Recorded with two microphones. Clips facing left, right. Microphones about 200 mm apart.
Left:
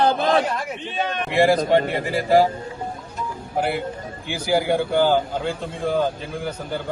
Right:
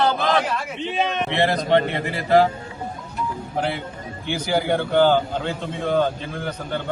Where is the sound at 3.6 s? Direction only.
5° left (ahead or behind).